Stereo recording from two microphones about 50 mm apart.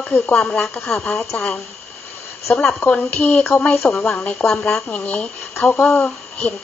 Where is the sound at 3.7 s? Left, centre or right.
Centre.